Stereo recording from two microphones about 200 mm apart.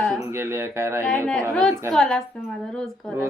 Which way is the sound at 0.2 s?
15° right (ahead or behind).